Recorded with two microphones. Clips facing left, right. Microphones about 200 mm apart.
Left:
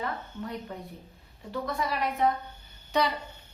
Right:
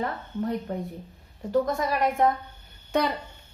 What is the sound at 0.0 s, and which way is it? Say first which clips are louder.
A woman's voice: right 6 dB; 40° right (ahead or behind).